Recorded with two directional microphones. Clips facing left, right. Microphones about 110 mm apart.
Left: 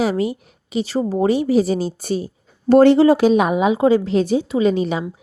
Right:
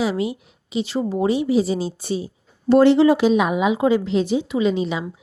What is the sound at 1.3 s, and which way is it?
A woman's voice, 50° left (ahead or behind).